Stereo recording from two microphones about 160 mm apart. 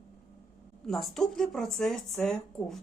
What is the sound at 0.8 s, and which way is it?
Speech, centre (ahead or behind).